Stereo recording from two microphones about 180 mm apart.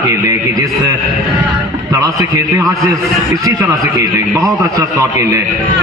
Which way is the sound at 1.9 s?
20° right (ahead or behind).